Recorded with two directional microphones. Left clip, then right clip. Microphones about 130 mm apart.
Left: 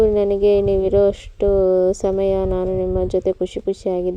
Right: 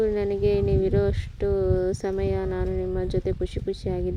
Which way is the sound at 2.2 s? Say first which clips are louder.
Left 9 dB; 10° left (ahead or behind).